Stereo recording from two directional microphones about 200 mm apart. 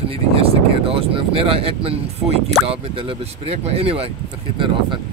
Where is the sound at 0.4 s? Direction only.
25° right (ahead or behind).